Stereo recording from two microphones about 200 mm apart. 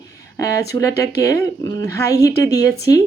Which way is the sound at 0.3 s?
15° left (ahead or behind).